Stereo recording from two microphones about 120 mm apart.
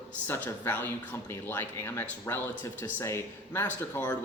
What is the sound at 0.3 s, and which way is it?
Speech, 15° left (ahead or behind).